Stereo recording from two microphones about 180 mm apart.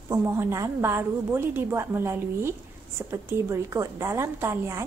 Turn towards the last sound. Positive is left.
turn(degrees=-15)  # may be behind; listen again after turning